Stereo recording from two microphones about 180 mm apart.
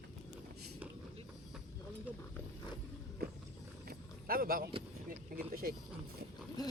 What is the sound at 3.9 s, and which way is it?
Vehicle, 55° right (ahead or behind).